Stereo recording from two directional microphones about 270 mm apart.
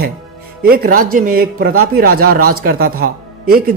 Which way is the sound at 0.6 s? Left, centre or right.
Right.